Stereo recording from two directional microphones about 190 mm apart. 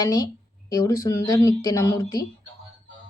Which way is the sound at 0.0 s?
15° left (ahead or behind).